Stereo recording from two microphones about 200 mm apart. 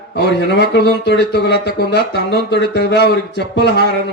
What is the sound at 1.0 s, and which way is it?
Speech, 60° left (ahead or behind).